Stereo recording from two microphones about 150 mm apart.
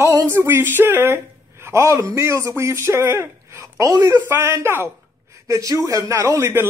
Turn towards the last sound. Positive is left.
turn(degrees=-15)  # may be behind; listen again after turning